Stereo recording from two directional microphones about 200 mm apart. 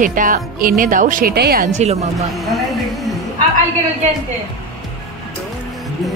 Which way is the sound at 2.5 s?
Centre (ahead or behind).